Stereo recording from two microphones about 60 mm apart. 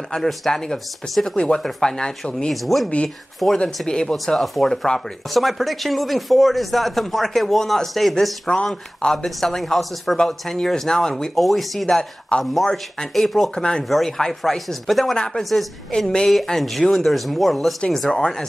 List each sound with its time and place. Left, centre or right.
0.1 s speech: centre
2.5 s speech: centre
12.3 s speech: centre
12.7 s speech: centre
13.6 s speech: centre
13.8 s speech: centre
15.1 s speech: centre
15.5 s speech: centre